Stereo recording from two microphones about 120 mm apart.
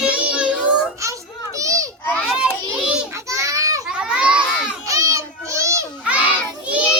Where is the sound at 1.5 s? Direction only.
25° right (ahead or behind).